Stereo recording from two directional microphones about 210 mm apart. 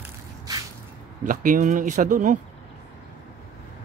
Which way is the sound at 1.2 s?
40° right (ahead or behind).